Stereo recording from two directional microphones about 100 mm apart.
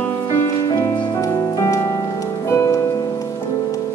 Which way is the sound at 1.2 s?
35° left (ahead or behind).